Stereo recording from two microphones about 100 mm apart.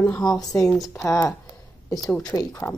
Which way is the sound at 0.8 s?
30° left (ahead or behind).